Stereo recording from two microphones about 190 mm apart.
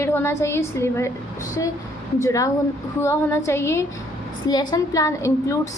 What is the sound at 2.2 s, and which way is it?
A woman's voice, 15° left (ahead or behind).